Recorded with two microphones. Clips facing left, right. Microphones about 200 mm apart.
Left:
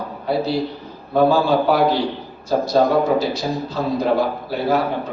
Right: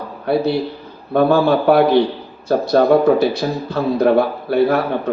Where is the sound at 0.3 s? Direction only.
60° right (ahead or behind).